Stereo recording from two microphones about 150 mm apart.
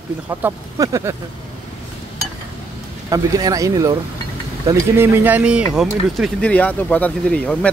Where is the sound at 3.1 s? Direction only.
25° right (ahead or behind).